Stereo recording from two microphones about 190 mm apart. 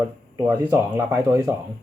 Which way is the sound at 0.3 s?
10° right (ahead or behind).